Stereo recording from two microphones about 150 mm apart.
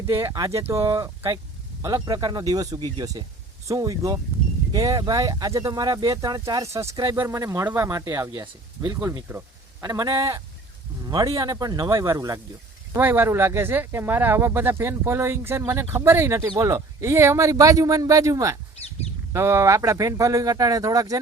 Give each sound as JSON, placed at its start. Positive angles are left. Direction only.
{"t": 0.1, "sound": "speech", "side_deg": -20}